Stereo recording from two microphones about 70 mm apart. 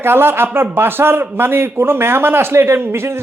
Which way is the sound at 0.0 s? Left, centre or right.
Right.